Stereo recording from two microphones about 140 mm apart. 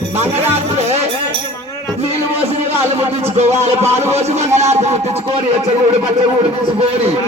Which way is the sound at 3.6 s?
50° right (ahead or behind).